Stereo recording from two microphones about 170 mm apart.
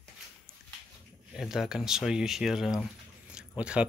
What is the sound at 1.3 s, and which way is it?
Speech, centre (ahead or behind).